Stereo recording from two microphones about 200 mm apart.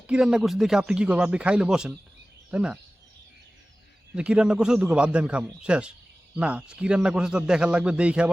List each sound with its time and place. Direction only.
0.1 s a man's voice: 5° right (ahead or behind)
4.1 s a man's voice: 5° right (ahead or behind)